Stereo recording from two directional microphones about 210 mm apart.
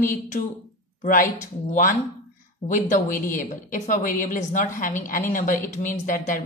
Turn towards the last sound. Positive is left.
turn(degrees=40)  # may be behind; listen again after turning